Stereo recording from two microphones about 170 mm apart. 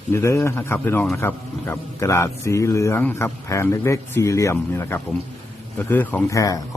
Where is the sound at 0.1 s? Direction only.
15° left (ahead or behind).